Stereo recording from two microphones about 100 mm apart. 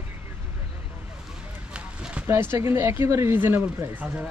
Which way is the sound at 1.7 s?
10° right (ahead or behind).